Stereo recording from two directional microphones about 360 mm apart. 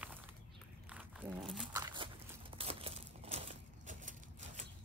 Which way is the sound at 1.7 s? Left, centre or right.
Centre.